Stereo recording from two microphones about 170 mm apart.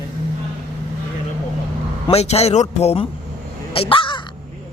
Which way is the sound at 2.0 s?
40° left (ahead or behind).